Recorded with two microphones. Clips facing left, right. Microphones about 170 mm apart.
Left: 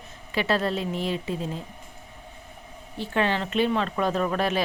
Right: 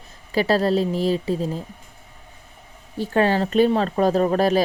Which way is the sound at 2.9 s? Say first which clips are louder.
Right 6 dB; 40° right (ahead or behind).